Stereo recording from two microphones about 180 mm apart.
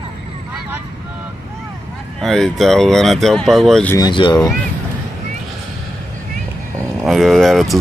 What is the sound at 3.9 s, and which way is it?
Speech, 25° left (ahead or behind).